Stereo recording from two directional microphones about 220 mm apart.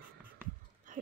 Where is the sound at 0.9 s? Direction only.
35° right (ahead or behind).